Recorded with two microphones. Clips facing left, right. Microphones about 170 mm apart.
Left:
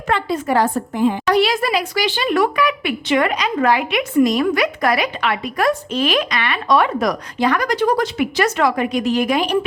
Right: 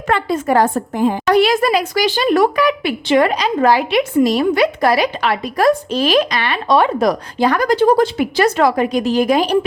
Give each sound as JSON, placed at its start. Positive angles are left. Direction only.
{"t": 0.1, "sound": "a woman's voice", "side_deg": -50}